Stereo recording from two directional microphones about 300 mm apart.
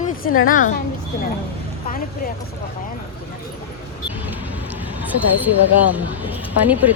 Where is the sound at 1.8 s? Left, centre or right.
Left.